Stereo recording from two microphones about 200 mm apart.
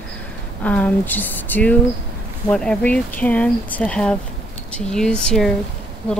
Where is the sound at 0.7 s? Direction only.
5° left (ahead or behind).